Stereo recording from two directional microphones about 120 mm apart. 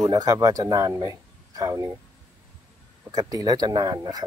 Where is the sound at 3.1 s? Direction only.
30° right (ahead or behind).